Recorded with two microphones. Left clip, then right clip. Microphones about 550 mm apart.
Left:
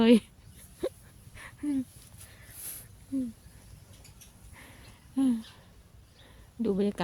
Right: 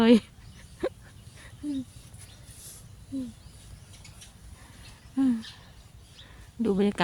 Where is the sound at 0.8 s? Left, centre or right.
Left.